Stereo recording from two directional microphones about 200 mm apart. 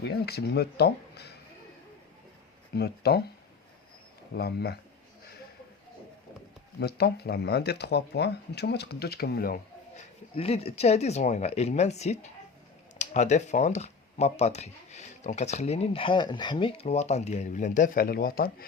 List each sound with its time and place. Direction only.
0.0 s speech: 55° left (ahead or behind)
2.7 s speech: 55° left (ahead or behind)
4.4 s speech: 55° left (ahead or behind)
6.7 s speech: 55° left (ahead or behind)
10.3 s speech: 30° left (ahead or behind); by 18.5 s 50° left (ahead or behind)